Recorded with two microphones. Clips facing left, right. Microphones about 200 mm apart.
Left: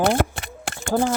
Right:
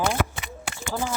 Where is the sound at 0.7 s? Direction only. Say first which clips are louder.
Left 8 dB; 55° left (ahead or behind).